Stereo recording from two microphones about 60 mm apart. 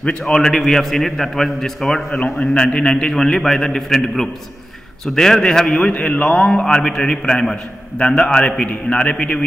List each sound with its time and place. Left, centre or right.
0.3 s a man's voice: centre
5.9 s a man's voice: left